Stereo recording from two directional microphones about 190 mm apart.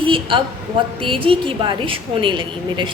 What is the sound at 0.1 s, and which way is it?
A woman's voice, 25° right (ahead or behind).